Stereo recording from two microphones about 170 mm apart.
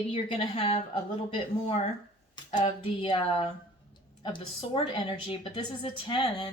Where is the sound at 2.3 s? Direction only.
30° left (ahead or behind).